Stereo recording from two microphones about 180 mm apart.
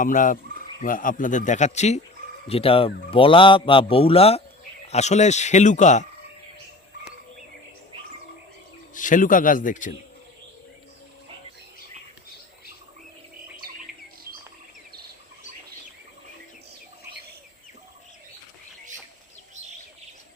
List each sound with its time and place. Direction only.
0.0 s speech: 50° left (ahead or behind)
9.0 s speech: 45° left (ahead or behind)